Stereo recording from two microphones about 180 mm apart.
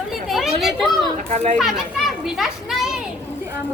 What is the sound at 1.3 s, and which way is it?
Speech, 35° right (ahead or behind).